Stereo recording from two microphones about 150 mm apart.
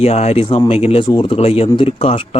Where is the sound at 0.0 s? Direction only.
45° left (ahead or behind).